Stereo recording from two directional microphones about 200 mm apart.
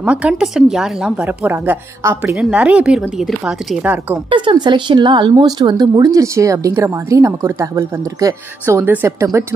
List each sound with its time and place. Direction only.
0.0 s a woman's voice: 5° right (ahead or behind)
4.3 s speech: 25° right (ahead or behind)